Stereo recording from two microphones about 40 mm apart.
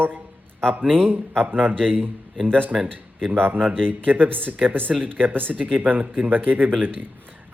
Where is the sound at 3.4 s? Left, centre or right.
Right.